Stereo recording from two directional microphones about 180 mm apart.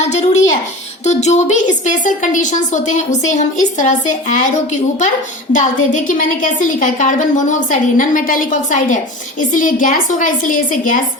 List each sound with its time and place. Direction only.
0.1 s a child's voice: 40° left (ahead or behind)